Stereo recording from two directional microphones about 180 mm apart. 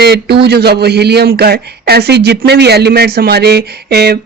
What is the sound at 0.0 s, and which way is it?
Speech, 65° right (ahead or behind).